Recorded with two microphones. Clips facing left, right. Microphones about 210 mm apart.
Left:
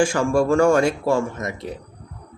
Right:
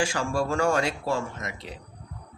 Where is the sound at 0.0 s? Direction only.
50° left (ahead or behind).